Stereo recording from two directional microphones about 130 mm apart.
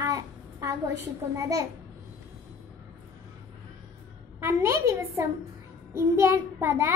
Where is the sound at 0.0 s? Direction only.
25° right (ahead or behind).